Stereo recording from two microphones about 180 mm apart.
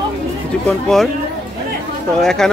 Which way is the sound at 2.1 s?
Centre (ahead or behind).